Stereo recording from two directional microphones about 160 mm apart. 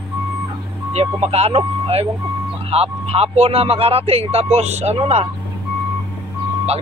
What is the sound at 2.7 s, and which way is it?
Speech, 40° right (ahead or behind).